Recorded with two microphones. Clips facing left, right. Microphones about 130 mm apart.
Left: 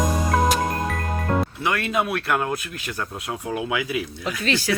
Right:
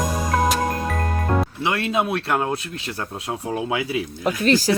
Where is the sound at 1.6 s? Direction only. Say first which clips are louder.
Right 2 dB; 25° right (ahead or behind).